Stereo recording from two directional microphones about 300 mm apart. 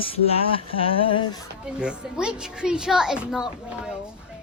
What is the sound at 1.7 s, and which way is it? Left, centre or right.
A child's voice, centre.